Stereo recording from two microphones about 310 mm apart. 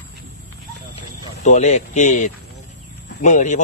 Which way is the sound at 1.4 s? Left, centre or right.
Left.